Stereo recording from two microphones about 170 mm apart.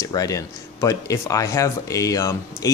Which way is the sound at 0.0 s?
20° left (ahead or behind).